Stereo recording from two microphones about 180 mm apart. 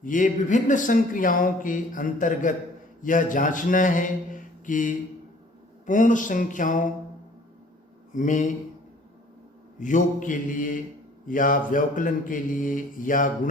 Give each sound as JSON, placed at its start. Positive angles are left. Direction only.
{"t": 0.0, "sound": "speech", "side_deg": 50}
{"t": 8.1, "sound": "speech", "side_deg": 45}
{"t": 9.8, "sound": "speech", "side_deg": 45}